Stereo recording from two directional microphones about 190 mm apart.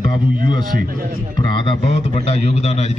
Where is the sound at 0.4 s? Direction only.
50° right (ahead or behind).